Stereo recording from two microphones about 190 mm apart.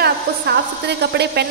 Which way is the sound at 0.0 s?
60° right (ahead or behind).